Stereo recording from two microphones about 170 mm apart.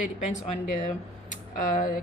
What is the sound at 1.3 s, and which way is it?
Speech, 55° left (ahead or behind).